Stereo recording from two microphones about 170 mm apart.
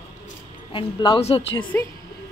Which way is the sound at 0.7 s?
30° left (ahead or behind).